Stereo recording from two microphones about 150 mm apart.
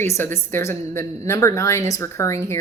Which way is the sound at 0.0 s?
15° left (ahead or behind).